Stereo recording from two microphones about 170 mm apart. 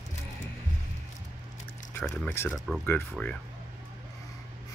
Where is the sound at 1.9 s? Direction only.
10° left (ahead or behind).